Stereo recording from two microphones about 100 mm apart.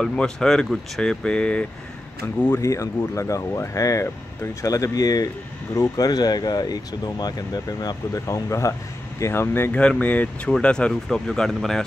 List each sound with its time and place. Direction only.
0.0 s speech: 10° left (ahead or behind)
2.2 s speech: 20° left (ahead or behind)
2.7 s speech: 30° left (ahead or behind); by 11.8 s 5° left (ahead or behind)